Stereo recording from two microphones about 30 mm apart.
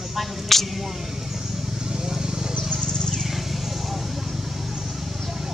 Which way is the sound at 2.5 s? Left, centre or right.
Left.